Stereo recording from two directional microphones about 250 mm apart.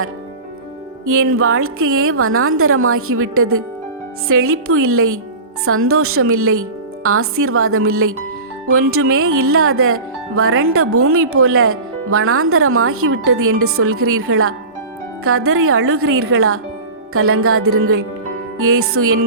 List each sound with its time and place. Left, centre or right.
1.1 s speech: right